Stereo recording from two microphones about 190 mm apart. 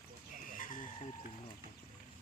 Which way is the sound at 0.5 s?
45° left (ahead or behind).